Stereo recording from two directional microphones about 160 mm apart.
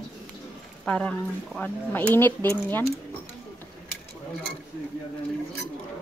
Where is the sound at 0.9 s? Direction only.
5° left (ahead or behind).